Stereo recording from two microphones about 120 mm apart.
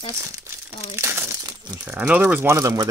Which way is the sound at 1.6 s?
35° right (ahead or behind).